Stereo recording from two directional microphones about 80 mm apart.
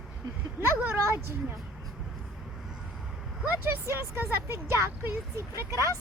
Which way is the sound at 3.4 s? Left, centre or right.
Right.